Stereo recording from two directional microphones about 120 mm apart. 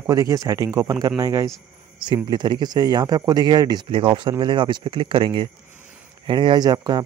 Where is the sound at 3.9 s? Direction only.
45° right (ahead or behind).